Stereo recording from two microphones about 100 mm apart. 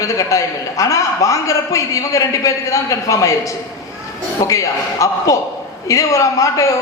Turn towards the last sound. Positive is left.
turn(degrees=30)  # may be behind; listen again after turning